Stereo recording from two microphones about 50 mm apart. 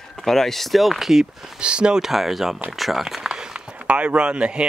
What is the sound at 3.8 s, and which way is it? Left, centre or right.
Speech, right.